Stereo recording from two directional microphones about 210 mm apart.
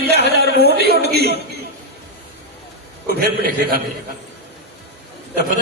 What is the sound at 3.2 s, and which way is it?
Speech, 45° right (ahead or behind).